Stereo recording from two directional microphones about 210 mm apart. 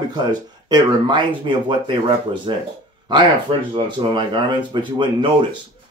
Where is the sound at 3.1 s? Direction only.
20° right (ahead or behind).